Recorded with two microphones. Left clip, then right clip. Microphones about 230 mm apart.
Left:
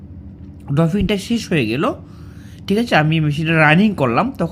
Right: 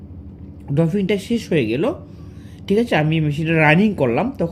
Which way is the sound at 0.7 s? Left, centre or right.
Left.